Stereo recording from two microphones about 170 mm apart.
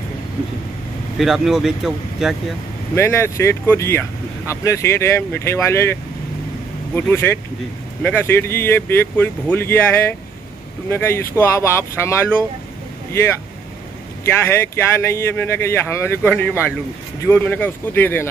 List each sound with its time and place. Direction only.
1.1 s speech: centre (ahead or behind)
2.9 s speech: 15° left (ahead or behind)
7.0 s speech: 10° left (ahead or behind)
14.2 s speech: 15° left (ahead or behind)